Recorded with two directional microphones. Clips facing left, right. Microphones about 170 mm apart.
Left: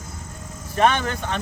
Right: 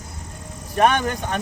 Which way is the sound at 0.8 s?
10° right (ahead or behind).